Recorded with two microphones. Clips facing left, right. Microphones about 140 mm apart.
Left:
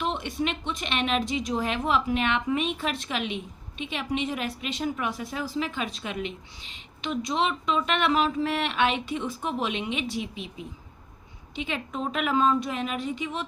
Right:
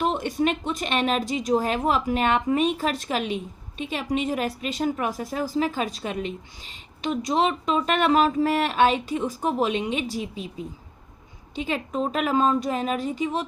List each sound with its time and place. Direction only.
0.0 s a woman's voice: 45° right (ahead or behind)
11.5 s a woman's voice: 40° right (ahead or behind)